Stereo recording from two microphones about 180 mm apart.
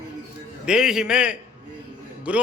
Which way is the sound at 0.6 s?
5° right (ahead or behind).